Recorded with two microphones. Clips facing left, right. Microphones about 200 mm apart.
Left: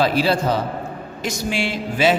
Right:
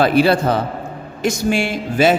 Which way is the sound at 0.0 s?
55° right (ahead or behind).